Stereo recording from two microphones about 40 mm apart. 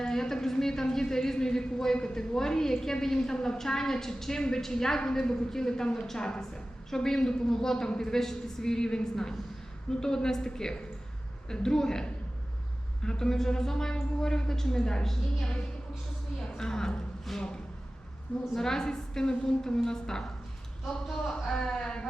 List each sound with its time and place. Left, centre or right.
0.0 s a woman's voice: centre
17.3 s a sound: centre
18.5 s a woman's voice: centre